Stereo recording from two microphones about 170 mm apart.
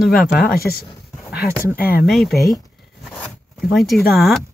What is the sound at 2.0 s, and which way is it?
Speech, centre (ahead or behind).